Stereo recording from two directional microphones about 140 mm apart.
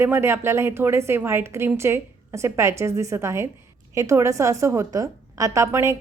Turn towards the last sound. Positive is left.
turn(degrees=-20)  # may be behind; listen again after turning